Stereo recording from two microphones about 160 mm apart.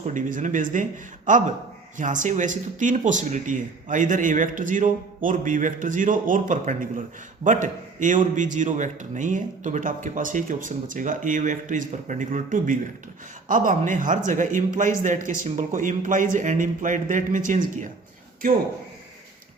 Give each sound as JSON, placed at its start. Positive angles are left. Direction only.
{"t": 0.0, "sound": "a man's voice", "side_deg": -55}